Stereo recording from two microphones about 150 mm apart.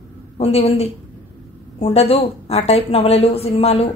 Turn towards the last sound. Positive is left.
turn(degrees=40)  # may be behind; listen again after turning